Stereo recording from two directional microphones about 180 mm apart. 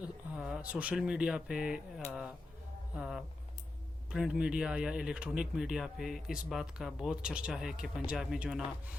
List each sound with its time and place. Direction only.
0.0 s speech: 5° right (ahead or behind)
2.9 s speech: 5° right (ahead or behind)